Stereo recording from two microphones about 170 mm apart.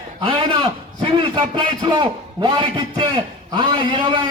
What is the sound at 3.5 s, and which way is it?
Speech, 30° right (ahead or behind).